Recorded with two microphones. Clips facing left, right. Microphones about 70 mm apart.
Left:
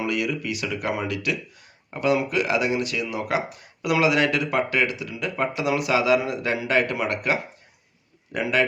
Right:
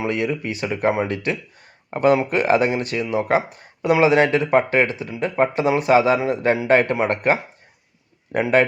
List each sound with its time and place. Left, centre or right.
0.0 s speech: right